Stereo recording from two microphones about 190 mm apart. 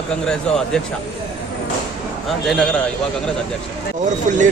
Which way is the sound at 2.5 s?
5° left (ahead or behind).